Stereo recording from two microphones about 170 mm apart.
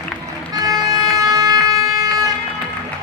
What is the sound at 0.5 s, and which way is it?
Music, 20° right (ahead or behind).